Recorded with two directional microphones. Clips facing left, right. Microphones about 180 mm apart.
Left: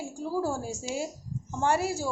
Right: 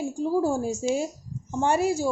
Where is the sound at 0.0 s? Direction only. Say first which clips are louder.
Right 6 dB; 20° right (ahead or behind).